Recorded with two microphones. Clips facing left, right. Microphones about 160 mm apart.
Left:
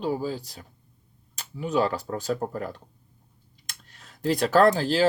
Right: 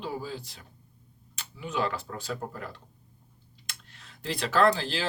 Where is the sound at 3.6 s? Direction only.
40° left (ahead or behind).